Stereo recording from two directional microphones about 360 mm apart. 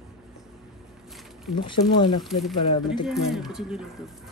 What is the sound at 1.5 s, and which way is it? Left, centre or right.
Speech, left.